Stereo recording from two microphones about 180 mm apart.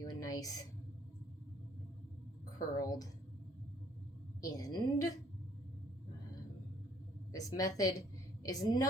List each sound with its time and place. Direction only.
0.0 s a sound: 20° left (ahead or behind)
2.6 s a woman's voice: 20° left (ahead or behind)
4.4 s a woman's voice: 20° left (ahead or behind)
7.3 s a woman's voice: 20° left (ahead or behind)